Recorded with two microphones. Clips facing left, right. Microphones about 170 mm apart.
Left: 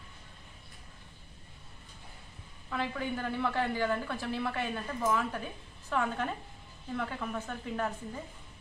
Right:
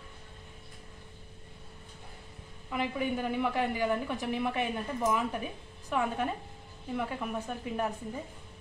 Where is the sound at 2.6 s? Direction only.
15° right (ahead or behind).